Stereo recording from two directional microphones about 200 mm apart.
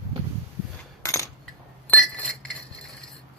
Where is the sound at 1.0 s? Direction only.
15° left (ahead or behind).